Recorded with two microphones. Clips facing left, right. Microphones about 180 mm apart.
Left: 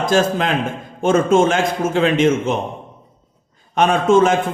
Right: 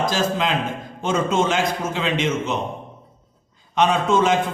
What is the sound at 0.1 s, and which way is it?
A man's voice, 50° left (ahead or behind).